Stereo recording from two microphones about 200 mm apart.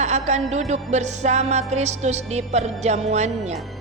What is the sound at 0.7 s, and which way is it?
Music, 35° right (ahead or behind).